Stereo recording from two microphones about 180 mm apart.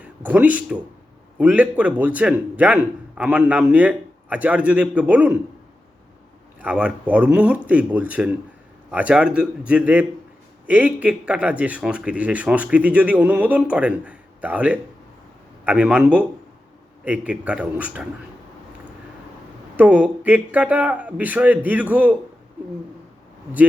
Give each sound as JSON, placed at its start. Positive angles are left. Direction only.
{"t": 0.0, "sound": "speech", "side_deg": -10}
{"t": 6.6, "sound": "speech", "side_deg": -5}
{"t": 19.7, "sound": "speech", "side_deg": -10}